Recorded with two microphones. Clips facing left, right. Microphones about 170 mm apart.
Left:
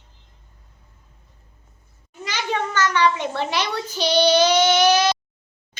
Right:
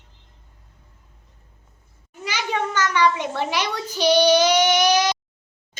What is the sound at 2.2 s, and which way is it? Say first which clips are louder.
A child's voice: even; 10° right (ahead or behind).